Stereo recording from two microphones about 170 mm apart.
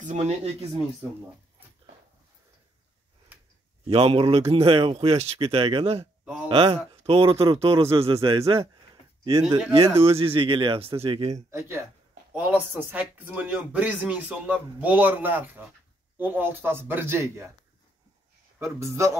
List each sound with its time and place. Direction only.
0.0 s speech: 45° right (ahead or behind)
3.9 s speech: 35° right (ahead or behind)
8.2 s speech: 20° right (ahead or behind)
11.5 s speech: 15° right (ahead or behind)
18.6 s speech: 15° right (ahead or behind)